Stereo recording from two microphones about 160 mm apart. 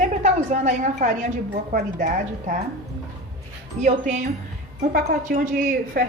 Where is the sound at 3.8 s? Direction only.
50° right (ahead or behind).